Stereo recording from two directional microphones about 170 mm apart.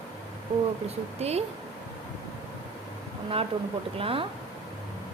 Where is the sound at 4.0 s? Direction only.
35° right (ahead or behind).